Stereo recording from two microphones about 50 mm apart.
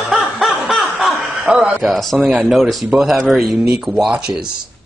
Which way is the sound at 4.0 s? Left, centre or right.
Centre.